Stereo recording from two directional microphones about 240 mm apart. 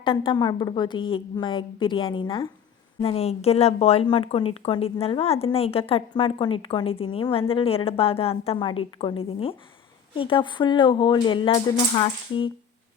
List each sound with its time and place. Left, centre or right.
0.0 s a woman's voice: left